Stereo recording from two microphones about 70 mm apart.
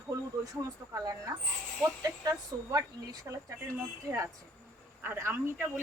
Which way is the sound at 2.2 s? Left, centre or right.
Right.